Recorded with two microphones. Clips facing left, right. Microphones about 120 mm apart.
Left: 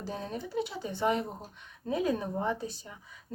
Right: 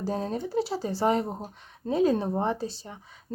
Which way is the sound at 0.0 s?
35° right (ahead or behind).